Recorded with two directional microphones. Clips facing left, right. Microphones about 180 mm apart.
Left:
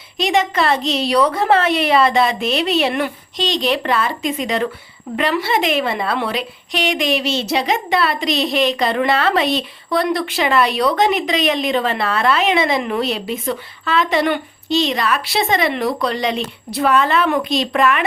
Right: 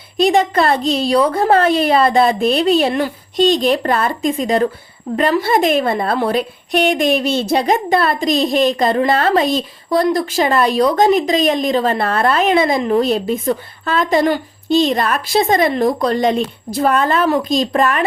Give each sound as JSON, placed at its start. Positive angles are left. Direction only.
{"t": 0.3, "sound": "a woman's voice", "side_deg": -35}
{"t": 3.3, "sound": "a woman's voice", "side_deg": -45}
{"t": 14.8, "sound": "a woman's voice", "side_deg": -50}